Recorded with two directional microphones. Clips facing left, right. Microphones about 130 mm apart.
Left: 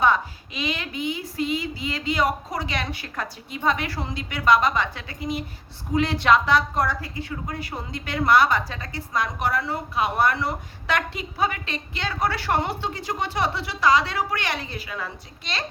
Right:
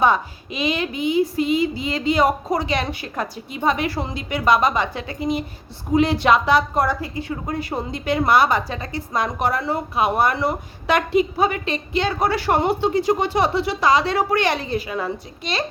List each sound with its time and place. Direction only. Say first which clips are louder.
0.0 s speech: right 3 dB; 15° right (ahead or behind)
7.3 s a woman's voice: right 6 dB; 30° right (ahead or behind); by 15.6 s 15° right (ahead or behind)